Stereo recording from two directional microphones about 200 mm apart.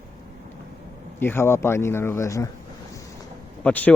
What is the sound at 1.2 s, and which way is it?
Speech, 10° left (ahead or behind).